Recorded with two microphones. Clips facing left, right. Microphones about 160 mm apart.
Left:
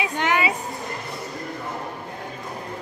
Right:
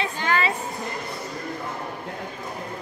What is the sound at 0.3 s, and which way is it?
Speech, 15° left (ahead or behind).